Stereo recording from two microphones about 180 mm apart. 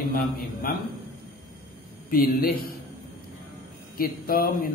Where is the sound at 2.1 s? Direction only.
55° left (ahead or behind).